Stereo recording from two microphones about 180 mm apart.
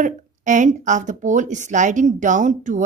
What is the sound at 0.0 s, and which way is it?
A woman's voice, 45° right (ahead or behind).